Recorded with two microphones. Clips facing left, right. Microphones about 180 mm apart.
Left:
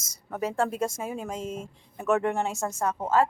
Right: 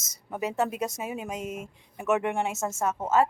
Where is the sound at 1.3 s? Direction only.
20° right (ahead or behind).